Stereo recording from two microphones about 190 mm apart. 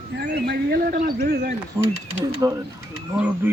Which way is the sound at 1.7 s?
20° right (ahead or behind).